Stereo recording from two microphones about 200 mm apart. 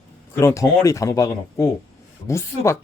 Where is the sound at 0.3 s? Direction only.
15° left (ahead or behind).